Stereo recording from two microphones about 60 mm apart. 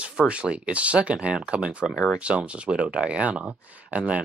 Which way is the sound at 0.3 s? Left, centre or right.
Centre.